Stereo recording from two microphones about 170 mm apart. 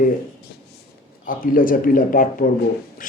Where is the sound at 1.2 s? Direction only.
55° left (ahead or behind).